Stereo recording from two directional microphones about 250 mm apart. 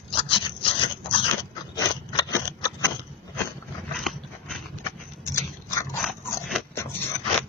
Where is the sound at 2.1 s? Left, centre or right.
Centre.